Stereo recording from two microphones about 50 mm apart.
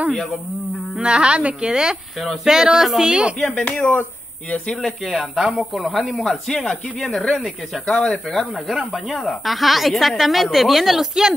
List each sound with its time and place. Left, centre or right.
1.0 s a woman's voice: right
2.4 s a sound: centre
5.1 s a woman's voice: centre
6.1 s speech: centre
7.8 s speech: left
8.3 s a woman's voice: centre